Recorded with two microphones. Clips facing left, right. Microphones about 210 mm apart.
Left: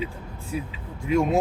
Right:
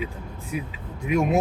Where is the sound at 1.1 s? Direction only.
15° right (ahead or behind).